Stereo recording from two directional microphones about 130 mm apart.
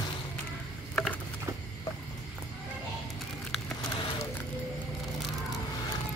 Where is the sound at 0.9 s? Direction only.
5° left (ahead or behind).